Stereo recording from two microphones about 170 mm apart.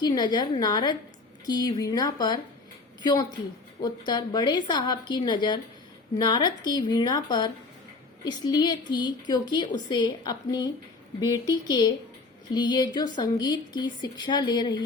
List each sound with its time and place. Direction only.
0.0 s a woman's voice: 25° left (ahead or behind)